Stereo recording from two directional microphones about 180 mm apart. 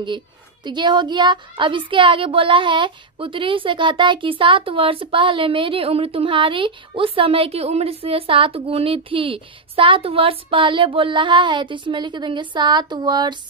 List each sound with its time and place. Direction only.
0.7 s a woman's voice: 25° right (ahead or behind)